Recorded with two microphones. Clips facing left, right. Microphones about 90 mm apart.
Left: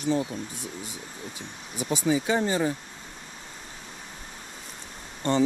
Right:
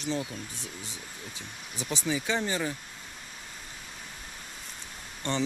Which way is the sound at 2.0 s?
45° left (ahead or behind).